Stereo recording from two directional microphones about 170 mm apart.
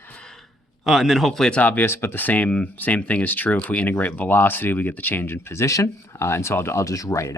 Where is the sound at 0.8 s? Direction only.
Centre (ahead or behind).